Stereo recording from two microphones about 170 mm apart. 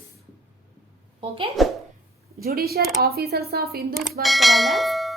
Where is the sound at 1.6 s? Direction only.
Centre (ahead or behind).